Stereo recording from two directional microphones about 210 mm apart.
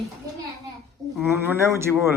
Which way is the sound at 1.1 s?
10° right (ahead or behind).